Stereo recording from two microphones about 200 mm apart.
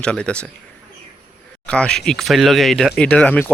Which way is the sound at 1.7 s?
5° left (ahead or behind).